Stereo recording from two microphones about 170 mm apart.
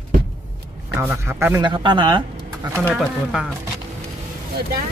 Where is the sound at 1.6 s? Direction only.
30° right (ahead or behind).